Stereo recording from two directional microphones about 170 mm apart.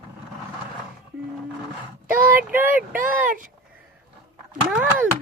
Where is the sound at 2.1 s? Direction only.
55° right (ahead or behind).